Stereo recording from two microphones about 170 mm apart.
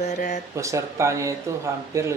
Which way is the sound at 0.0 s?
45° left (ahead or behind).